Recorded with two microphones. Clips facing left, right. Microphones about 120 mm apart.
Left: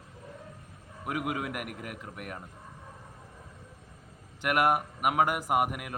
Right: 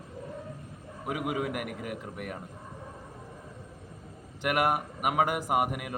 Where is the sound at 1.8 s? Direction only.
50° left (ahead or behind).